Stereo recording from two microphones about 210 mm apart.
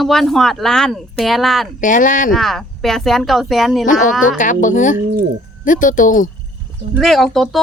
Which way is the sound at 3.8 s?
40° left (ahead or behind).